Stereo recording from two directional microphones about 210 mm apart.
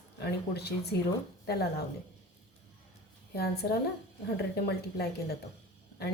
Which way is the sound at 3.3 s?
50° left (ahead or behind).